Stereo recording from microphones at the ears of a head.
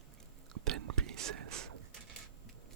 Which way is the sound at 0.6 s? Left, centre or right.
Right.